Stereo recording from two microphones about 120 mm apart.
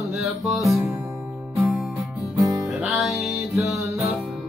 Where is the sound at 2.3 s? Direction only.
30° right (ahead or behind).